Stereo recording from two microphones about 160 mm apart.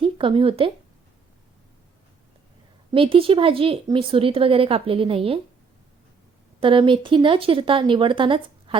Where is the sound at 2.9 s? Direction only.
35° right (ahead or behind).